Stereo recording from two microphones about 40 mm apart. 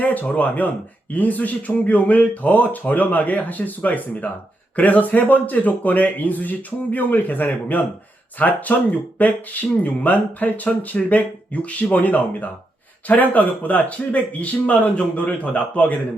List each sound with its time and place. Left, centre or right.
0.0 s speech: left